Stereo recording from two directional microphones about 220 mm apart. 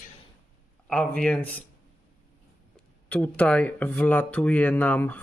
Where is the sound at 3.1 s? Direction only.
5° left (ahead or behind).